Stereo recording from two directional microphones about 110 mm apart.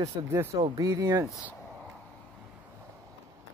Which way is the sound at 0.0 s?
30° right (ahead or behind).